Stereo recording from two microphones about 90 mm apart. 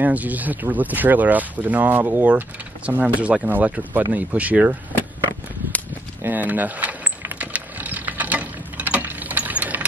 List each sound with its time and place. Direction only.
0.0 s speech: 20° right (ahead or behind)
6.2 s vehicle: 20° right (ahead or behind)